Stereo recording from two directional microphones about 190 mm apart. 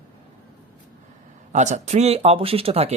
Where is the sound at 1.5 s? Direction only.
40° right (ahead or behind).